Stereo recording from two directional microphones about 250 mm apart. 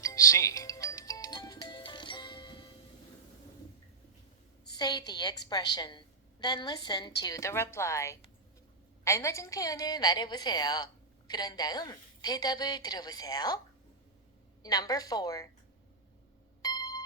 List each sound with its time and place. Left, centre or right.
0.0 s music: centre
4.8 s a woman's voice: centre
14.6 s a woman's voice: centre
16.6 s a sound: centre